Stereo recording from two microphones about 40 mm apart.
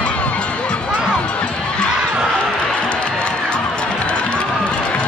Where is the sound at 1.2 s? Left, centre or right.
Left.